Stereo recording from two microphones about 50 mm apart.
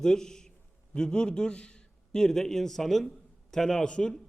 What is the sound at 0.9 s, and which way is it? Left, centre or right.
A man's voice, centre.